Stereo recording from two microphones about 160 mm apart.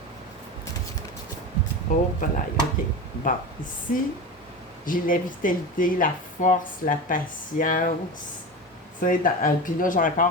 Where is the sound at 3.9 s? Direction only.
55° left (ahead or behind).